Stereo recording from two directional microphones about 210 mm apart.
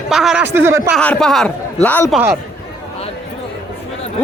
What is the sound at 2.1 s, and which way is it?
Speech, 10° right (ahead or behind).